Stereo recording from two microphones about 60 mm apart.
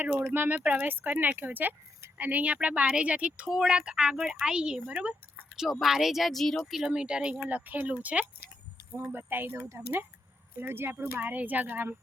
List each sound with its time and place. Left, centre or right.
0.0 s speech: right
0.6 s speech: right
0.9 s speech: right
5.8 s speech: centre
6.8 s speech: centre
7.4 s speech: right
9.1 s speech: right